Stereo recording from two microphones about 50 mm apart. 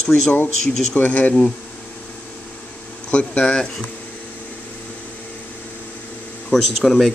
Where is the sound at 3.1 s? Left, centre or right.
Left.